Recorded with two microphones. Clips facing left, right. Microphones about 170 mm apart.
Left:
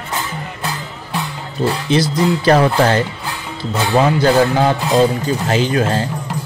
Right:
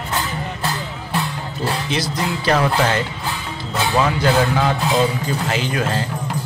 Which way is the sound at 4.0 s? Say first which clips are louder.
Left 5 dB; 30° left (ahead or behind).